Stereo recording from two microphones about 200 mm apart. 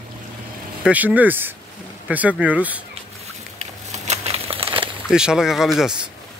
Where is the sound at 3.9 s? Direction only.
35° right (ahead or behind).